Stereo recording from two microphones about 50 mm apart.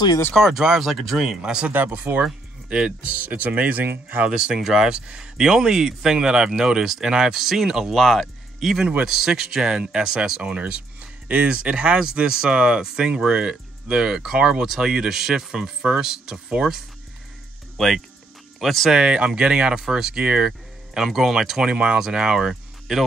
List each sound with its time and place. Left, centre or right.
0.4 s speech: centre
1.4 s speech: centre
1.7 s speech: right
2.2 s speech: centre
3.1 s speech: right
4.3 s speech: centre
8.0 s speech: centre
17.7 s speech: centre
18.9 s speech: centre
21.6 s speech: right